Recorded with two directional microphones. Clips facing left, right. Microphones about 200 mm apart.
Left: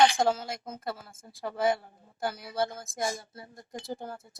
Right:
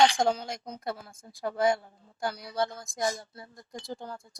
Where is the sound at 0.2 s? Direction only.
5° left (ahead or behind).